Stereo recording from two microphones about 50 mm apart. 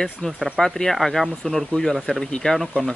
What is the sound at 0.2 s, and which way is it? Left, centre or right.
Speech, left.